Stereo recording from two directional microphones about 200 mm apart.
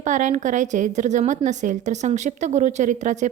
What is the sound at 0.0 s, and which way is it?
A woman's voice, 40° right (ahead or behind).